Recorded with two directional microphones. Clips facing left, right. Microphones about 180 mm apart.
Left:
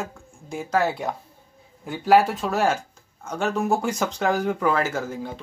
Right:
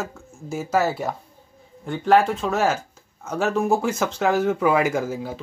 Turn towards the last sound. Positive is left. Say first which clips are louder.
# right 4 dB
turn(degrees=-10)  # may be behind; listen again after turning